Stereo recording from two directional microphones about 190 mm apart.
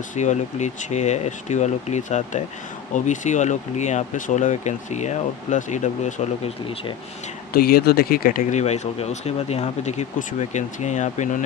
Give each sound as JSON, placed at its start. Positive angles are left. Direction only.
{"t": 0.1, "sound": "speech", "side_deg": 40}
{"t": 7.5, "sound": "speech", "side_deg": 55}